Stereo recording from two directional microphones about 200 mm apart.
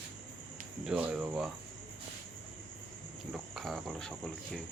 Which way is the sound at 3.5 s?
Centre (ahead or behind).